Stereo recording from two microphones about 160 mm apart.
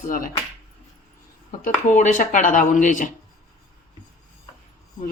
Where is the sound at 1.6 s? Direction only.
50° left (ahead or behind).